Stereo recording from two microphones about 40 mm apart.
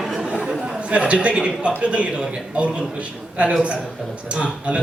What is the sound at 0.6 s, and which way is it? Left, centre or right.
A man's voice, right.